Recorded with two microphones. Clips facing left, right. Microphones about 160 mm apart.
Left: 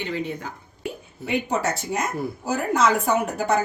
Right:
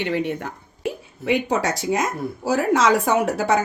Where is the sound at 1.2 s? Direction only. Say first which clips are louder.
Right 3 dB; 90° right.